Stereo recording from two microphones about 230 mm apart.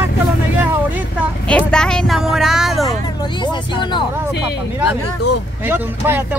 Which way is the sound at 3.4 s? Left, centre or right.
Centre.